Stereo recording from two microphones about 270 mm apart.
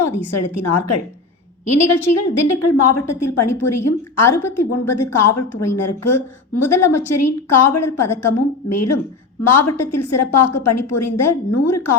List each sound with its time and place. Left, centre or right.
0.0 s a woman's voice: left
2.0 s a woman's voice: left